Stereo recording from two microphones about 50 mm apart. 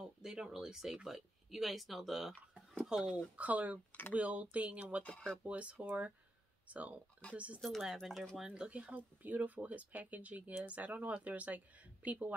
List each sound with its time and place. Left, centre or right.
0.0 s speech: centre
3.3 s speech: right
7.6 s speech: centre
8.5 s speech: right